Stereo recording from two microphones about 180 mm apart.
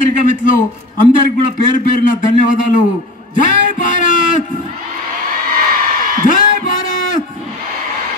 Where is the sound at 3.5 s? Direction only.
45° left (ahead or behind).